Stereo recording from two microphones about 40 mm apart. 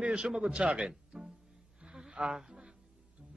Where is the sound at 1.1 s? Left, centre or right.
Centre.